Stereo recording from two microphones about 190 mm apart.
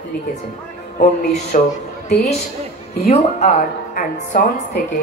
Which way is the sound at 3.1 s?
35° left (ahead or behind).